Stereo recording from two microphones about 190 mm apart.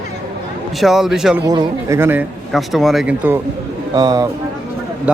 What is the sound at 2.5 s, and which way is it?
Speech, centre (ahead or behind).